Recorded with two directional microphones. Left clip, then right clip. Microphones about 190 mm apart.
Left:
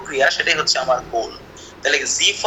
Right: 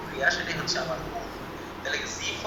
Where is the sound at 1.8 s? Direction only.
50° left (ahead or behind).